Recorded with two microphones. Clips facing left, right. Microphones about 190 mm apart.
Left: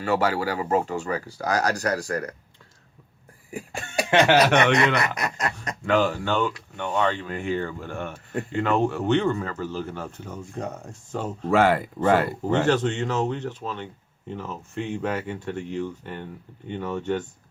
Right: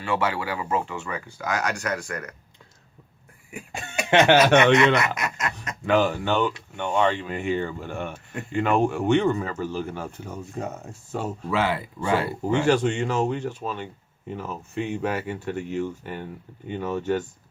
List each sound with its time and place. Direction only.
0.0 s speech: 40° left (ahead or behind)
4.0 s a sound: 35° left (ahead or behind)
4.5 s speech: 35° left (ahead or behind)
5.8 s speech: 15° right (ahead or behind)
11.4 s speech: 50° left (ahead or behind)
12.5 s speech: 10° right (ahead or behind)